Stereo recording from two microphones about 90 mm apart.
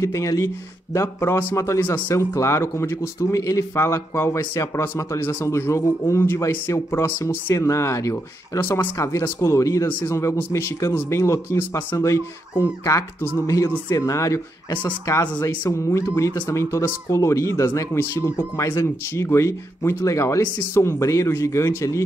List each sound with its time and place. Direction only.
0.0 s speech: 35° left (ahead or behind)
15.7 s speech: 35° left (ahead or behind)